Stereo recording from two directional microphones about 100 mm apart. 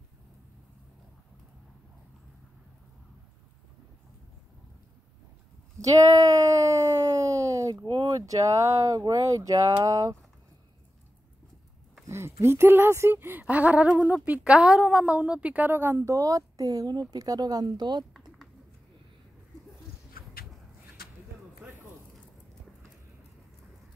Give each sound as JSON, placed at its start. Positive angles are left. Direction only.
{"t": 5.8, "sound": "speech", "side_deg": -35}
{"t": 7.2, "sound": "a sound", "side_deg": -35}
{"t": 7.8, "sound": "speech", "side_deg": -35}
{"t": 12.1, "sound": "a woman's voice", "side_deg": -25}